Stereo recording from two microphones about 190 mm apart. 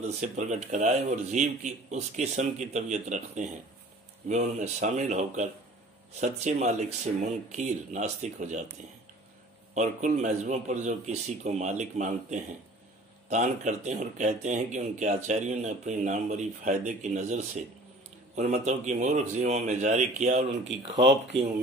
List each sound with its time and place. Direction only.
0.0 s speech: 40° right (ahead or behind)
9.8 s speech: 40° right (ahead or behind)